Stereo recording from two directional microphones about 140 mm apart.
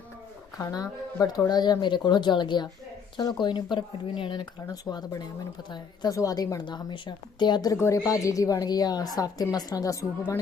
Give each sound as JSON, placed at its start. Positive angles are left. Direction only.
{"t": 0.6, "sound": "a woman's voice", "side_deg": 25}